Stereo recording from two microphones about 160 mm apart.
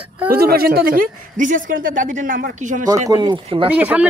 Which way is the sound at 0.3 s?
70° right (ahead or behind).